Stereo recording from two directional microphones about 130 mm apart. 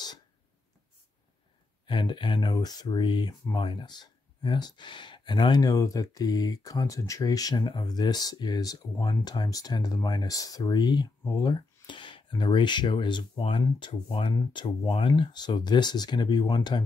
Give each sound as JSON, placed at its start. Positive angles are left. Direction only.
{"t": 1.9, "sound": "speech", "side_deg": 40}